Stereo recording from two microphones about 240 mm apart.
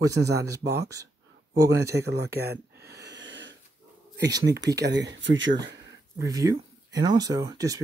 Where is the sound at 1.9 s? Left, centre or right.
Right.